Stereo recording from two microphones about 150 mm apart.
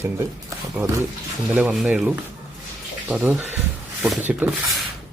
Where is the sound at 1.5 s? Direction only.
5° right (ahead or behind).